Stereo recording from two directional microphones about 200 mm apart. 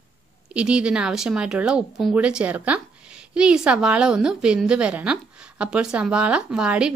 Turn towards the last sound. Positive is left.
turn(degrees=-5)  # may be behind; listen again after turning